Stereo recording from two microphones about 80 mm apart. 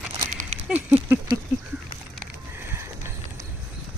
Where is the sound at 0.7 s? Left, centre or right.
Right.